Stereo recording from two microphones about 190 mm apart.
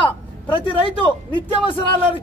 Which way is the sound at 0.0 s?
25° left (ahead or behind).